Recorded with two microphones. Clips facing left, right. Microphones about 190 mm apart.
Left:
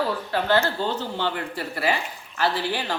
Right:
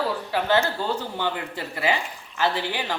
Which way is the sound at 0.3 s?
15° right (ahead or behind).